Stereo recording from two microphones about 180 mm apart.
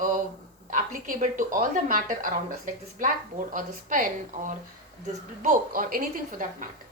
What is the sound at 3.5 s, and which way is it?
A woman's voice, 50° right (ahead or behind).